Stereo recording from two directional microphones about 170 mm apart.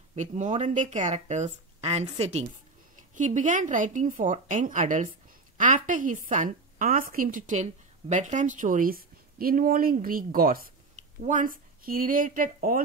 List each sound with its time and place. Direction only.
0.1 s a woman's voice: 40° right (ahead or behind)